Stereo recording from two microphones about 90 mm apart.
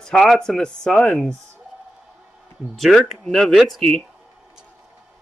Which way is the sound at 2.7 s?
Centre (ahead or behind).